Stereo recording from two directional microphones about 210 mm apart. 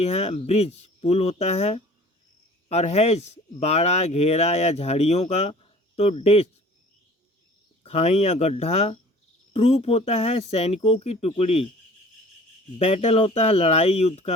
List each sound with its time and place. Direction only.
0.0 s speech: 30° left (ahead or behind)
7.9 s speech: 30° left (ahead or behind)
12.8 s speech: 30° left (ahead or behind)